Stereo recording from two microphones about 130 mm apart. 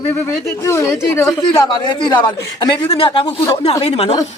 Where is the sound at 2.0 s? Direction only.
35° left (ahead or behind); by 4.1 s 55° left (ahead or behind).